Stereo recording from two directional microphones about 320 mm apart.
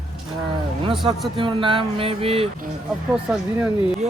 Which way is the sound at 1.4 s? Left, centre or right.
Centre.